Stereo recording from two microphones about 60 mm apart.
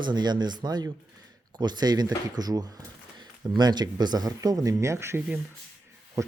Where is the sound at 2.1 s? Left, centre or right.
Right.